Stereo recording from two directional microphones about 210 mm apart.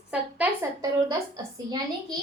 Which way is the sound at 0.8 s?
15° right (ahead or behind).